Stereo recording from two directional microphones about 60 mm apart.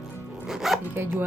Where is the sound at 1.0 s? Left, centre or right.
Right.